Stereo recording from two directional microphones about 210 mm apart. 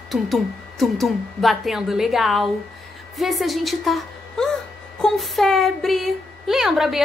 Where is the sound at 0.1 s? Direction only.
Centre (ahead or behind).